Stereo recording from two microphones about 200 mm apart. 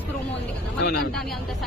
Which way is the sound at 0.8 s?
50° left (ahead or behind).